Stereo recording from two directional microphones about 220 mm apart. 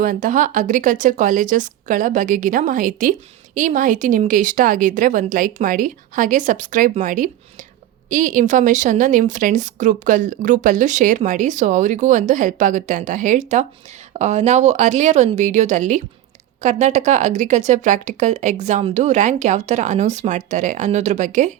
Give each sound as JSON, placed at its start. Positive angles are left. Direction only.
{"t": 0.0, "sound": "speech", "side_deg": -40}